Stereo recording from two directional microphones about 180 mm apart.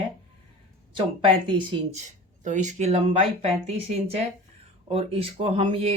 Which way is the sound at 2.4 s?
45° right (ahead or behind).